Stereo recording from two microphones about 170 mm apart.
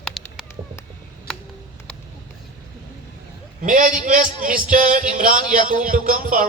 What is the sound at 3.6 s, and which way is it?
Music, 50° right (ahead or behind).